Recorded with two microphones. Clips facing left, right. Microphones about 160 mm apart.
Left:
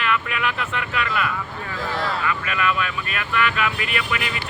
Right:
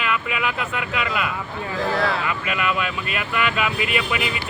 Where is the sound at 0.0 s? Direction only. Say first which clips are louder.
Even; 5° right (ahead or behind).